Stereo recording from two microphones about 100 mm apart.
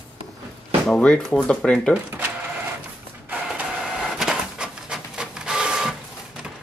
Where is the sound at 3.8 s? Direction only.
5° right (ahead or behind).